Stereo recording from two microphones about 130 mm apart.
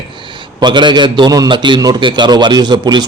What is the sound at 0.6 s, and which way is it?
A man's voice, 35° right (ahead or behind).